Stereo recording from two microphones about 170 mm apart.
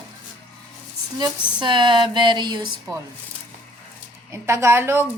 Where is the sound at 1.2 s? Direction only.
25° right (ahead or behind).